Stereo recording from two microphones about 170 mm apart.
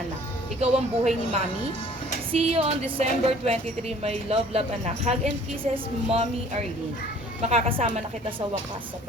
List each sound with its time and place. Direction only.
0.6 s speech: 40° right (ahead or behind)